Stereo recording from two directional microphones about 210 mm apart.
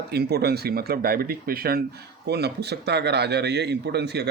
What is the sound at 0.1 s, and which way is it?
A man's voice, 50° right (ahead or behind).